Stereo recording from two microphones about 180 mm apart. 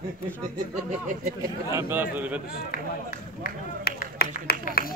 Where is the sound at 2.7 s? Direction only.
55° left (ahead or behind).